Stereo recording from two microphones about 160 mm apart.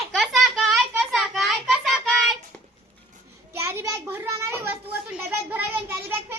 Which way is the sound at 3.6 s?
15° right (ahead or behind).